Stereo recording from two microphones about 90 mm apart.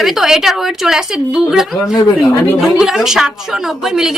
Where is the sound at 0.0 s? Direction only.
5° right (ahead or behind).